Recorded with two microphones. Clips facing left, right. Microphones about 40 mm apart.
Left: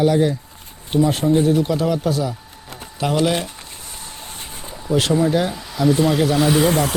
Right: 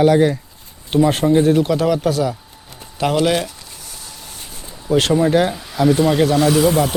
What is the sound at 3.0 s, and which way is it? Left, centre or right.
Speech, right.